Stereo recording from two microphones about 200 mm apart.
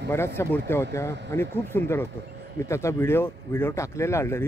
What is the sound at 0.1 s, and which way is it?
Speech, 10° left (ahead or behind).